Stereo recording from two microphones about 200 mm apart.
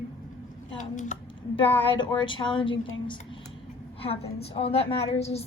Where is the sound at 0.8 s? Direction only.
40° left (ahead or behind).